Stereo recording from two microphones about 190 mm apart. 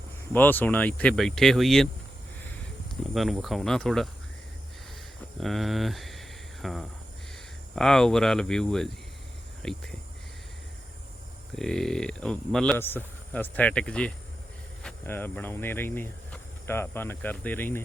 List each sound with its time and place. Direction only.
0.3 s speech: 10° left (ahead or behind)
3.0 s speech: centre (ahead or behind)
5.4 s speech: centre (ahead or behind)
11.5 s speech: centre (ahead or behind)